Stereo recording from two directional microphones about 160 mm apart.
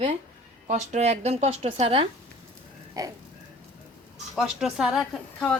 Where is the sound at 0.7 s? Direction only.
45° right (ahead or behind).